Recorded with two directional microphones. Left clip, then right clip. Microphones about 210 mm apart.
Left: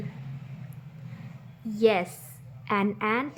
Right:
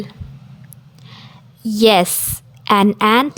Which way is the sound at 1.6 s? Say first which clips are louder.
Right 11 dB; 50° right (ahead or behind).